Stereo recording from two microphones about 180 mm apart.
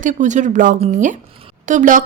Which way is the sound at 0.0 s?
45° right (ahead or behind).